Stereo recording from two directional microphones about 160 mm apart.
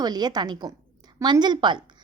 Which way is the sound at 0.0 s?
25° right (ahead or behind).